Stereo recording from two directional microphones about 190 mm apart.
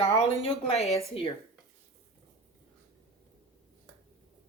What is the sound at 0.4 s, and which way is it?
Speech, 35° left (ahead or behind).